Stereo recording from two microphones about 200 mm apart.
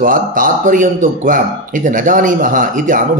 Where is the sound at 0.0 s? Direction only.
45° right (ahead or behind).